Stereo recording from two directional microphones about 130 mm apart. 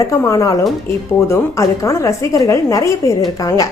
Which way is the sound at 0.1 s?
25° left (ahead or behind).